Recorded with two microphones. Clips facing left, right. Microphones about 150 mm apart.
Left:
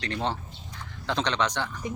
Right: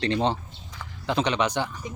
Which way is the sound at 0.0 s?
20° right (ahead or behind).